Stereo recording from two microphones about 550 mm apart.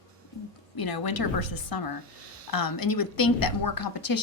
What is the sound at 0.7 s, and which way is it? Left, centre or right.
A woman's voice, left.